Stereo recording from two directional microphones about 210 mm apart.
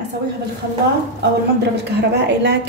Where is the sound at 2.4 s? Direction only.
55° right (ahead or behind).